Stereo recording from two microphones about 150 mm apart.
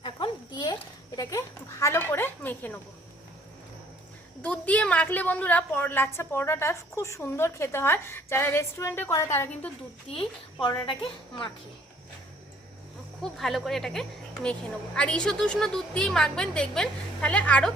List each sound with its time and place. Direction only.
0.0 s a sound: 30° left (ahead or behind); by 2.7 s 10° left (ahead or behind)
4.4 s a woman's voice: 10° left (ahead or behind)
10.6 s a woman's voice: 30° left (ahead or behind)
13.2 s a woman's voice: centre (ahead or behind)